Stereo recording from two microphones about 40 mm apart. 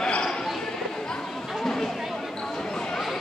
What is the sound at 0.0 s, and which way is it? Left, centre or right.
Basketball bounce, centre.